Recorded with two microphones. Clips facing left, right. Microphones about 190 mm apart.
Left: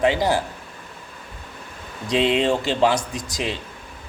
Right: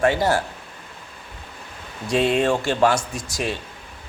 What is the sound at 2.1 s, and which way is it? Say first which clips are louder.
A man's voice: even; 20° left (ahead or behind).